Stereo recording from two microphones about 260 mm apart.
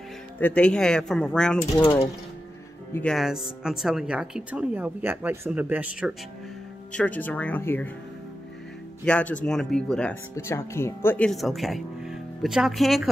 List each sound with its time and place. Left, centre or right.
0.4 s speech: centre
1.8 s speech: centre
2.9 s speech: centre
9.0 s speech: centre